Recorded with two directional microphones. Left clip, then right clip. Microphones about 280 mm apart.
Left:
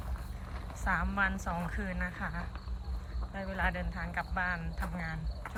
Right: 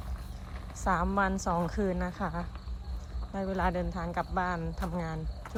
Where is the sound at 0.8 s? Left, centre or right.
Centre.